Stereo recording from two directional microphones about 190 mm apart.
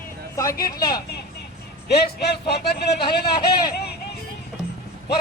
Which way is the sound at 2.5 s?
60° left (ahead or behind).